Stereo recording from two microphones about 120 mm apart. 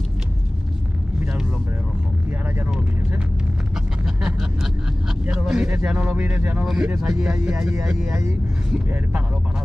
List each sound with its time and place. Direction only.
4.0 s vehicle: 5° right (ahead or behind)
6.6 s speech: 5° right (ahead or behind)
8.1 s speech: 25° right (ahead or behind)